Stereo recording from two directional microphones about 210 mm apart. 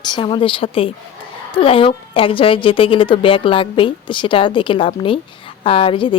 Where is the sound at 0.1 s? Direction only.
25° left (ahead or behind).